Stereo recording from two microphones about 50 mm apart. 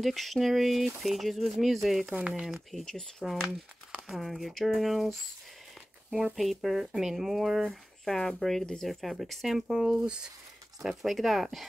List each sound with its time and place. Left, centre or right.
0.0 s speech: centre
2.1 s speech: right
2.8 s speech: centre
3.3 s speech: centre
6.3 s speech: centre
8.0 s speech: centre
9.7 s speech: centre
10.8 s speech: centre